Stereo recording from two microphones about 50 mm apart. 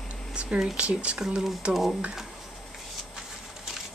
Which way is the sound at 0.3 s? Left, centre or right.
Centre.